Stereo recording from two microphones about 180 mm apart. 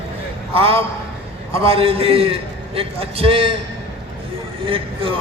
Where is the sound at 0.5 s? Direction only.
30° right (ahead or behind).